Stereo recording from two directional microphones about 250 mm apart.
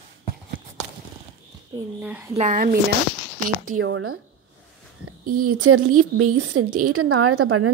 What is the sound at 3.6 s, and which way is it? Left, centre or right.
Speech, right.